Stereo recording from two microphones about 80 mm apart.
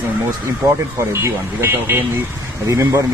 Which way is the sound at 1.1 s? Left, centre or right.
Right.